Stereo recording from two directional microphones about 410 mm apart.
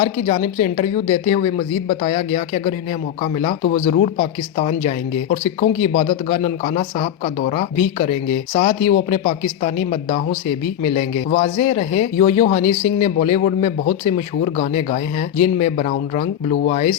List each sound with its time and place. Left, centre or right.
0.0 s speech: centre
3.9 s speech: centre